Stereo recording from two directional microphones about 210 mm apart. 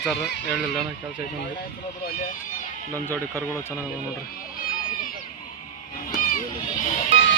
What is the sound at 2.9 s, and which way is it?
Speech, 10° left (ahead or behind).